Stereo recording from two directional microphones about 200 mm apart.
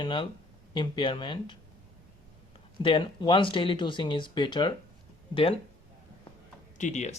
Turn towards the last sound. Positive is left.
turn(degrees=35)  # may be behind; listen again after turning